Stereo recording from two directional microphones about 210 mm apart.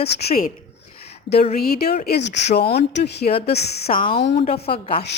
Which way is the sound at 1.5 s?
45° left (ahead or behind).